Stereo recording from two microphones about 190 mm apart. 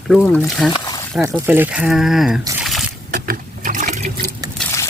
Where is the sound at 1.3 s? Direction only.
10° right (ahead or behind).